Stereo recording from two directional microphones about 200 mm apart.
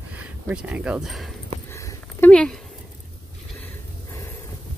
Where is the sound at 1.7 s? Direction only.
15° left (ahead or behind).